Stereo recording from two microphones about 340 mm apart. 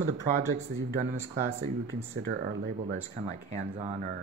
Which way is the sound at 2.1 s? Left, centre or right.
Right.